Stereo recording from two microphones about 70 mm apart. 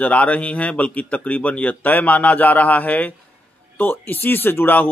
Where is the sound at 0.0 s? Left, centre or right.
Centre.